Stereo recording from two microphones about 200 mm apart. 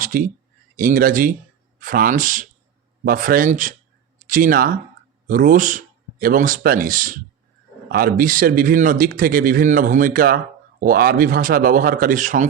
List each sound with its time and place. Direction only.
0.0 s speech: 45° right (ahead or behind)